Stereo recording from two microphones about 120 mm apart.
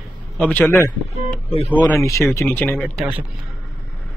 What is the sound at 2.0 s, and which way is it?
Speech, 25° left (ahead or behind).